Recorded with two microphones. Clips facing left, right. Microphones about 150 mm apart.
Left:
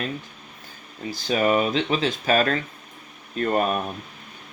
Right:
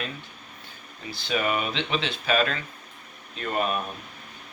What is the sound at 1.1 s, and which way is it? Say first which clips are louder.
Speech: left 6 dB; 40° left (ahead or behind).